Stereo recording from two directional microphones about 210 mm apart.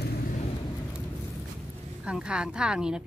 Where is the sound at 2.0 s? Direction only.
5° right (ahead or behind).